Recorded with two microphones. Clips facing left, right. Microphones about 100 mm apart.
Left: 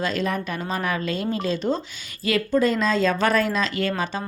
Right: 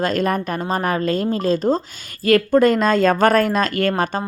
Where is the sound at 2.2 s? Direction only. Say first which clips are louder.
Right 7 dB; 50° right (ahead or behind).